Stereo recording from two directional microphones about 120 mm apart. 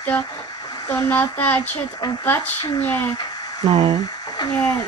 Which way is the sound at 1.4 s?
15° left (ahead or behind).